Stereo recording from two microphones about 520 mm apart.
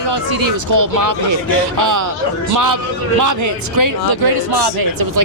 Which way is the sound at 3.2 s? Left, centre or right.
Right.